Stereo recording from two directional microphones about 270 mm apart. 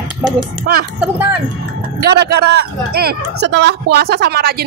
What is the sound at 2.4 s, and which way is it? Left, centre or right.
A woman's voice, right.